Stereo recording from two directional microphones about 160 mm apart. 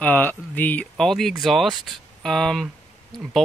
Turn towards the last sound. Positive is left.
turn(degrees=0)  # may be behind; listen again after turning